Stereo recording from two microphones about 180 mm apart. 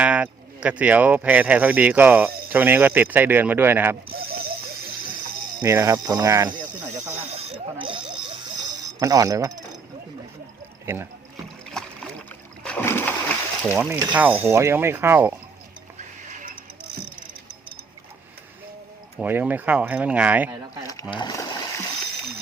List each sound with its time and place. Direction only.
0.0 s speech: 5° right (ahead or behind)
4.1 s a sound: 55° right (ahead or behind)
5.5 s speech: 15° right (ahead or behind)
7.1 s speech: 35° right (ahead or behind)
9.0 s speech: 20° right (ahead or behind)
10.9 s speech: 10° right (ahead or behind)
11.7 s boat: 5° left (ahead or behind)
12.6 s splash: 10° left (ahead or behind)
13.7 s speech: 5° right (ahead or behind)
16.3 s a sound: 45° right (ahead or behind)
19.2 s speech: 10° right (ahead or behind)
20.8 s a sound: 20° left (ahead or behind)